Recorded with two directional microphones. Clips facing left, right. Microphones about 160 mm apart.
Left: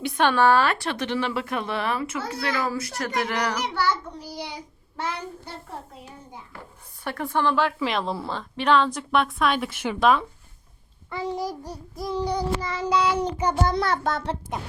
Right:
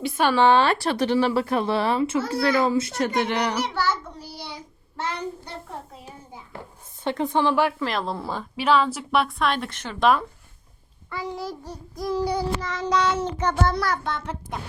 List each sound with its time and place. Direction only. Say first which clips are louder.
0.0 s a woman's voice: even; 5° right (ahead or behind)
0.3 s speech: right 3 dB; 20° right (ahead or behind)
4.2 s child singing: left 3 dB; 15° left (ahead or behind)
7.0 s a woman's voice: right 3 dB; 20° right (ahead or behind)
7.8 s a woman's voice: left 1 dB; centre (ahead or behind)
11.1 s a child's voice: left 2 dB; 20° left (ahead or behind)
11.9 s a woman's voice: right 2 dB; centre (ahead or behind)
12.5 s a child's voice: even; 10° left (ahead or behind)
13.7 s child singing: left 1 dB; 25° left (ahead or behind)
14.0 s a child's voice: left 3 dB; 40° left (ahead or behind)